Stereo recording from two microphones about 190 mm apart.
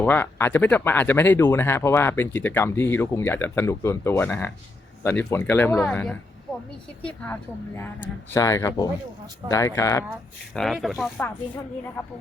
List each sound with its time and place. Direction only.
0.0 s speech: 10° left (ahead or behind)
10.5 s speech: centre (ahead or behind)